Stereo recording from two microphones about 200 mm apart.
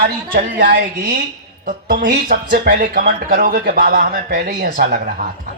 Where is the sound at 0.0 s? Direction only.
45° right (ahead or behind).